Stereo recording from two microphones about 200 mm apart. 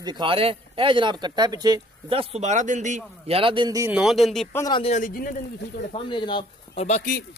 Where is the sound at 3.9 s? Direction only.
Centre (ahead or behind).